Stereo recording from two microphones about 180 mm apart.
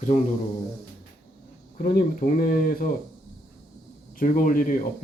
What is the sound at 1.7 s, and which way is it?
A man's voice, 50° left (ahead or behind).